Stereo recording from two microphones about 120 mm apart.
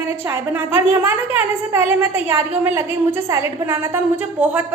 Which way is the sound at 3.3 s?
20° right (ahead or behind).